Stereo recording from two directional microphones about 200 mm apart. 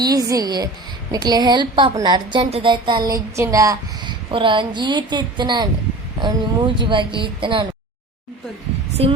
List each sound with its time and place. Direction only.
0.0 s speech: 20° right (ahead or behind)
9.0 s speech: 30° right (ahead or behind)